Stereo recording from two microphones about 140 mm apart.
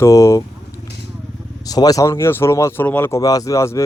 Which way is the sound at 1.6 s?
25° left (ahead or behind).